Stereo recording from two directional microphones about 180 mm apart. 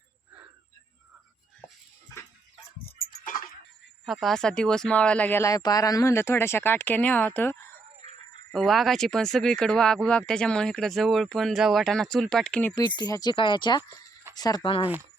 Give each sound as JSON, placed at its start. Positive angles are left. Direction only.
{"t": 4.0, "sound": "speech", "side_deg": 0}
{"t": 8.0, "sound": "a sound", "side_deg": -40}
{"t": 8.5, "sound": "speech", "side_deg": 0}
{"t": 13.0, "sound": "speech", "side_deg": 20}